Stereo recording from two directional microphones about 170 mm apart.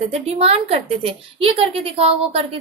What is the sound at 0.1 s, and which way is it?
A woman's voice, 35° right (ahead or behind).